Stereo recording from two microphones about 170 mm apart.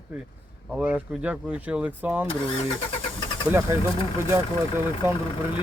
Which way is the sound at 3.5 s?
15° right (ahead or behind).